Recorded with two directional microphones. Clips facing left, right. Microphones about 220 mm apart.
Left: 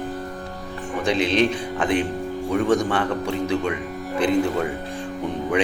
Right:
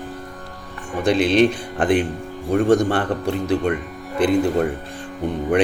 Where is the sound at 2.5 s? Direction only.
50° right (ahead or behind).